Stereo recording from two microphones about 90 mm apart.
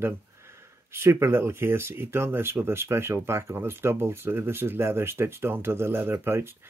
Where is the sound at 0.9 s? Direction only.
30° right (ahead or behind).